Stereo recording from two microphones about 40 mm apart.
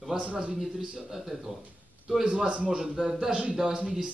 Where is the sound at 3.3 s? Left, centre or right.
Right.